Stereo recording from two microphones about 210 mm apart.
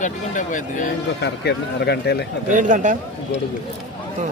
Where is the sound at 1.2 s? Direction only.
55° left (ahead or behind).